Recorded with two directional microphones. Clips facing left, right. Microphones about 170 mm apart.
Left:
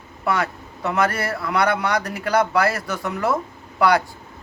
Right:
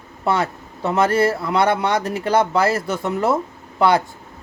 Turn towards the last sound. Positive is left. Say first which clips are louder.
# right 1 dB
turn(degrees=-25)  # may be behind; listen again after turning